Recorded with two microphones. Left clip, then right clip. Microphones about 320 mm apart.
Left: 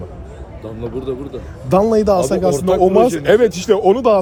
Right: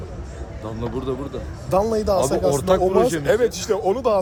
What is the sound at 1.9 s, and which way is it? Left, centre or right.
A man's voice, centre.